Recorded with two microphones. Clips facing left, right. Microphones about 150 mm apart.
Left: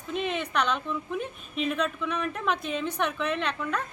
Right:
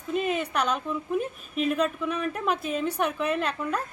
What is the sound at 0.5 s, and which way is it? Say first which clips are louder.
Speech: left 3 dB; 40° right (ahead or behind).